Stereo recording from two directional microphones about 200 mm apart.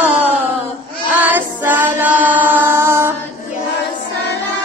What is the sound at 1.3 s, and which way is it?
Music, 10° right (ahead or behind).